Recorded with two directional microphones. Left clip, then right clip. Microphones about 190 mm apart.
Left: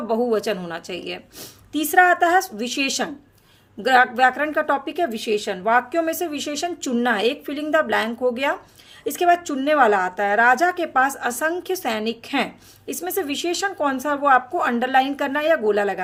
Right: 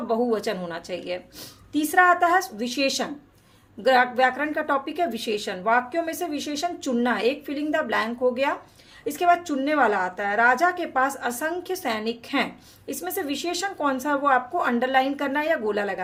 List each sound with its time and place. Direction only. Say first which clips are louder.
0.1 s speech: left 3 dB; 25° left (ahead or behind)